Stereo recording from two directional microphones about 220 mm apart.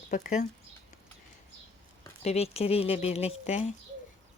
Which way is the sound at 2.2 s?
30° left (ahead or behind).